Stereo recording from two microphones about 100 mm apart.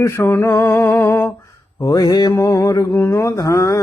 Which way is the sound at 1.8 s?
35° left (ahead or behind).